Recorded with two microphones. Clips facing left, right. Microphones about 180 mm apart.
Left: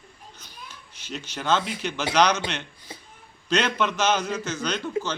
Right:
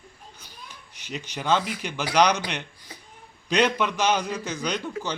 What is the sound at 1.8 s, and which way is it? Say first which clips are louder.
Speech: even; 10° right (ahead or behind).